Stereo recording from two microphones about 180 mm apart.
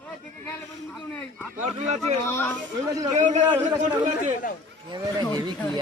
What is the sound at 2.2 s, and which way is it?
Speech, 15° left (ahead or behind).